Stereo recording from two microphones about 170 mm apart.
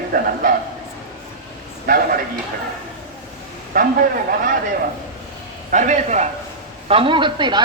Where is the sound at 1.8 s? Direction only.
60° right (ahead or behind).